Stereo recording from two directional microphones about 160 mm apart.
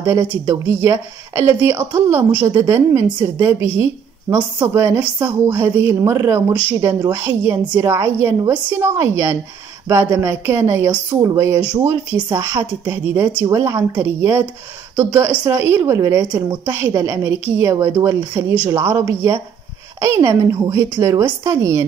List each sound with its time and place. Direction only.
0.0 s a woman's voice: 15° right (ahead or behind)